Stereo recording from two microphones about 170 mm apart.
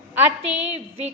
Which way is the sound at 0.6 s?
40° right (ahead or behind).